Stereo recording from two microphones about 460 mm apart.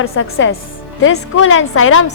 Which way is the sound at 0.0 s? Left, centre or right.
Left.